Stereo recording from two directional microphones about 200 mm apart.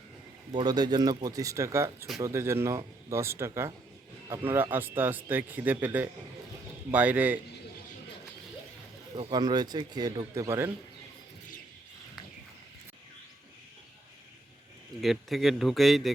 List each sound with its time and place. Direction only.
0.5 s speech: 20° right (ahead or behind)
9.1 s speech: 25° right (ahead or behind)
15.0 s a man's voice: centre (ahead or behind)